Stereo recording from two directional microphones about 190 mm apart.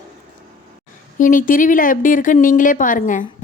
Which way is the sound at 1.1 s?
45° left (ahead or behind).